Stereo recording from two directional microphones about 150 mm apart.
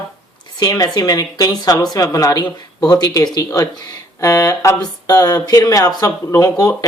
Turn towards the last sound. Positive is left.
turn(degrees=25)  # may be behind; listen again after turning